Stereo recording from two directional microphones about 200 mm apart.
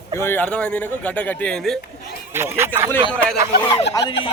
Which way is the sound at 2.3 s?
10° right (ahead or behind).